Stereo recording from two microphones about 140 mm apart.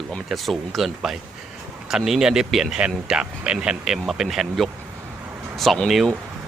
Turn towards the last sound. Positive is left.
turn(degrees=0)  # may be behind; listen again after turning